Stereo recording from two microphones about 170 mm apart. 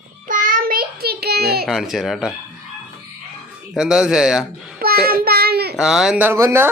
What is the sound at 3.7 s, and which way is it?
Speech, 5° right (ahead or behind).